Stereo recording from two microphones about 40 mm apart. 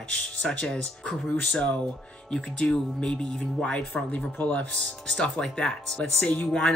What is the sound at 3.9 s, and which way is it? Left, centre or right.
Speech, left.